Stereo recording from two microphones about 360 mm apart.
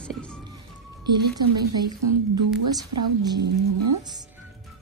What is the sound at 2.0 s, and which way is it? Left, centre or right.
A woman's voice, right.